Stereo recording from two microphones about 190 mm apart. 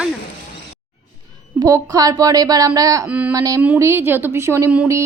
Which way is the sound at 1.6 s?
20° right (ahead or behind).